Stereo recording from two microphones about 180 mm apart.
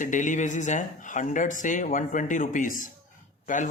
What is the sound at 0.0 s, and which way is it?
Speech, 45° left (ahead or behind).